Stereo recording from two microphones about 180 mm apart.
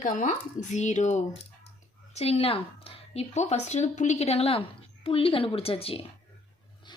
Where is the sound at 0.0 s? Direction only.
45° left (ahead or behind).